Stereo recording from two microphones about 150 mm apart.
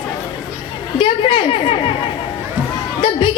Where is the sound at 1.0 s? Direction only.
35° left (ahead or behind).